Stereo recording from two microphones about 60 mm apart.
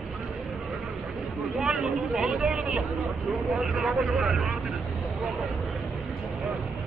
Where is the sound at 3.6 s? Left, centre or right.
Centre.